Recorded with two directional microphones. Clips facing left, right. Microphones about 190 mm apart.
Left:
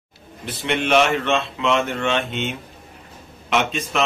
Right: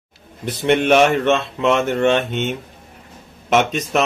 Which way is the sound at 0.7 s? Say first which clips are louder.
Right 5 dB; 45° right (ahead or behind).